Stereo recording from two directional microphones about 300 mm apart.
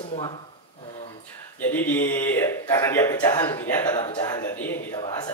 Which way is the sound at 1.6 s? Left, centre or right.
Centre.